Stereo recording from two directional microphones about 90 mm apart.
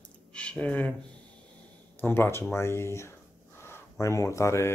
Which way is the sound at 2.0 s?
25° left (ahead or behind).